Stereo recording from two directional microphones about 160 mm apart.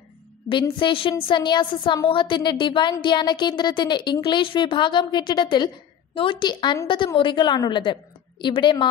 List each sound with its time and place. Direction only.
0.5 s a woman's voice: 30° left (ahead or behind)